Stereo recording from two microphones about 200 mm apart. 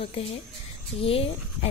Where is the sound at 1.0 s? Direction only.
30° left (ahead or behind).